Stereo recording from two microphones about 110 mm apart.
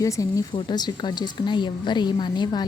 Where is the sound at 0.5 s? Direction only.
40° left (ahead or behind).